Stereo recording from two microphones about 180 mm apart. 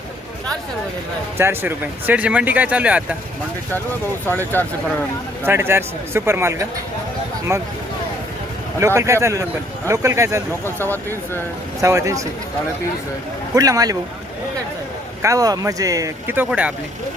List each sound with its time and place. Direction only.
1.4 s speech: 10° right (ahead or behind)
4.3 s speech: 10° left (ahead or behind)
5.5 s speech: 15° right (ahead or behind)
8.8 s speech: 15° right (ahead or behind)
10.8 s speech: 10° left (ahead or behind)
11.8 s speech: 15° right (ahead or behind)
13.6 s speech: 20° right (ahead or behind)
15.2 s speech: 20° right (ahead or behind)